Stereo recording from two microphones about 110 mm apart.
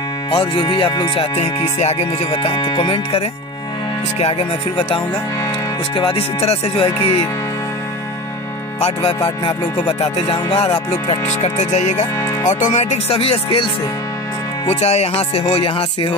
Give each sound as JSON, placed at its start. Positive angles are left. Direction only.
{"t": 0.4, "sound": "speech", "side_deg": 45}
{"t": 1.8, "sound": "speech", "side_deg": 75}
{"t": 2.3, "sound": "speech", "side_deg": 45}
{"t": 8.8, "sound": "speech", "side_deg": 65}
{"t": 9.9, "sound": "speech", "side_deg": 70}
{"t": 11.1, "sound": "speech", "side_deg": 80}
{"t": 12.2, "sound": "music", "side_deg": 30}
{"t": 12.7, "sound": "speech", "side_deg": 75}
{"t": 14.7, "sound": "speech", "side_deg": 80}
{"t": 15.3, "sound": "speech", "side_deg": 55}